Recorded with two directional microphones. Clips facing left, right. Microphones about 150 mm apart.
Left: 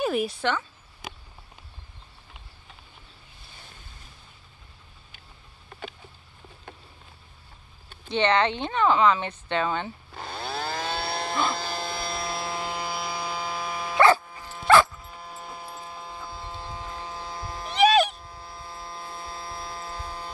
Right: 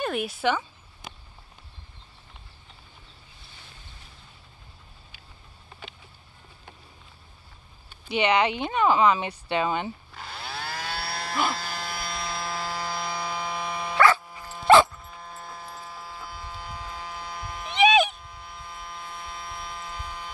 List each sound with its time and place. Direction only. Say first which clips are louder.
0.0 s speech: left 1 dB; centre (ahead or behind)
8.1 s speech: even; 10° right (ahead or behind)
10.1 s chainsaw: left 4 dB; 25° left (ahead or behind)
11.5 s electric shaver: left 3 dB; 25° left (ahead or behind); by 13.9 s 5° left (ahead or behind)
14.4 s dog: right 1 dB; 5° right (ahead or behind)
14.9 s a sound: left 1 dB; 5° left (ahead or behind); by 17.7 s 30° left (ahead or behind)
17.7 s a sound: left 1 dB; centre (ahead or behind)
18.1 s electric shaver: left 1 dB; 30° left (ahead or behind)